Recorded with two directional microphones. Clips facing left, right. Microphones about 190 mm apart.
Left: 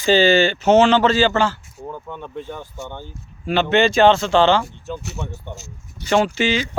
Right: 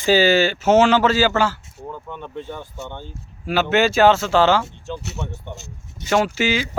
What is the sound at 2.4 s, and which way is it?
Speech, centre (ahead or behind).